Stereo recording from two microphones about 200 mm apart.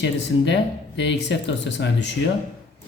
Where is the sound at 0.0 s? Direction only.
60° left (ahead or behind).